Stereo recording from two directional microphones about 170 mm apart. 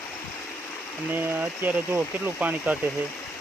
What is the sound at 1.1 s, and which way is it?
Speech, 10° right (ahead or behind).